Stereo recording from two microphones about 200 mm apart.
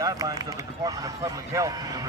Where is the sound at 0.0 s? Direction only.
15° right (ahead or behind).